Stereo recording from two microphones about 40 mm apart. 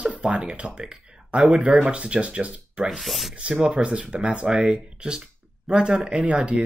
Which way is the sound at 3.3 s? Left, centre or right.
Right.